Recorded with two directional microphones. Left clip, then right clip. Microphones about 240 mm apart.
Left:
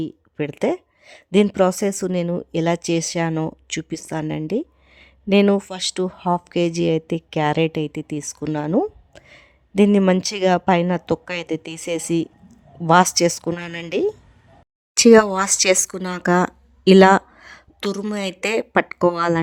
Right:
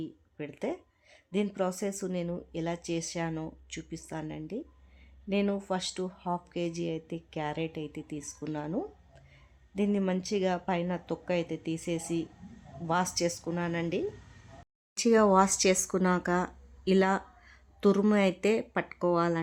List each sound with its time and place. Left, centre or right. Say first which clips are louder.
0.0 s speech: left 14 dB; left
16.1 s a sound: left 11 dB; left
18.3 s speech: left 10 dB; left